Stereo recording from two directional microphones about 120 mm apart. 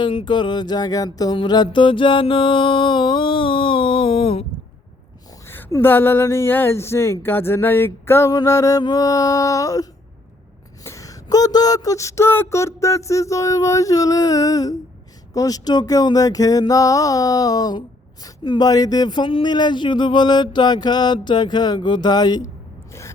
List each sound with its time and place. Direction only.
0.0 s speech: 45° left (ahead or behind)
1.4 s mantra: 35° left (ahead or behind)
5.5 s a sound: 15° left (ahead or behind)
5.7 s speech: 20° left (ahead or behind)
10.8 s speech: 25° left (ahead or behind)